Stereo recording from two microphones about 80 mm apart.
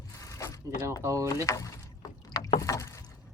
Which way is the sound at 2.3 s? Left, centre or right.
Left.